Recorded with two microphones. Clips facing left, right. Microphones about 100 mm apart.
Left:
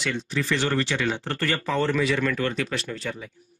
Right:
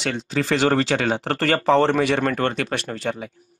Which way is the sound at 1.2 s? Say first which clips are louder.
Right 6 dB; 90° right.